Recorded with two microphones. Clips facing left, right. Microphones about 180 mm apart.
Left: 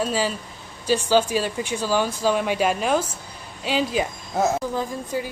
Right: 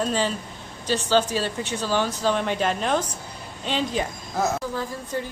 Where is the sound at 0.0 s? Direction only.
5° left (ahead or behind).